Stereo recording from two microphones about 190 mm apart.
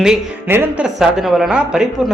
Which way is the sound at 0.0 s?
5° right (ahead or behind).